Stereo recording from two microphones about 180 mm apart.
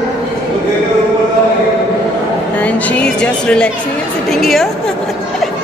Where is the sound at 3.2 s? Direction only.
5° left (ahead or behind).